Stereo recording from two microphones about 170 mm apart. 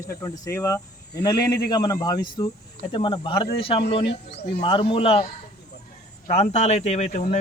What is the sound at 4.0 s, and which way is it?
Speech, 80° left.